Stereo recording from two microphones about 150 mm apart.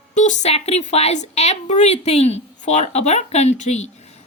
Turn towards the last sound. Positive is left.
turn(degrees=50)  # may be behind; listen again after turning